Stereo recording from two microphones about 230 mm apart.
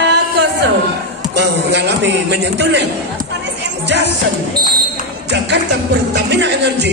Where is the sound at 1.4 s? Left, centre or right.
Right.